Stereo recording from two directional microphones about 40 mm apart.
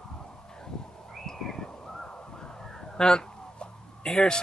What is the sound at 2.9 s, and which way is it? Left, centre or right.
Fowl, centre.